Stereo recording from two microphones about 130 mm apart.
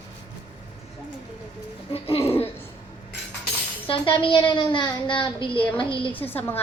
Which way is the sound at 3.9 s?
45° left (ahead or behind).